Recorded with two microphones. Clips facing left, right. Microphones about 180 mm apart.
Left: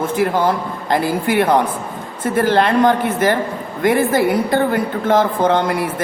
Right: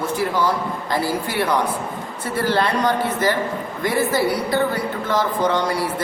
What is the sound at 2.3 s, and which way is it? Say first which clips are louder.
A woman's voice: left 5 dB; 50° left (ahead or behind).